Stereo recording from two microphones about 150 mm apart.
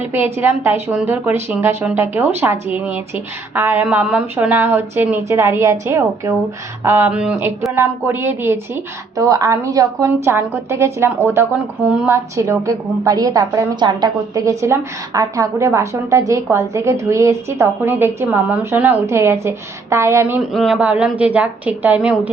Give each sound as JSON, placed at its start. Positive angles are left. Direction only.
{"t": 0.1, "sound": "a woman's voice", "side_deg": -15}
{"t": 20.4, "sound": "a woman's voice", "side_deg": 0}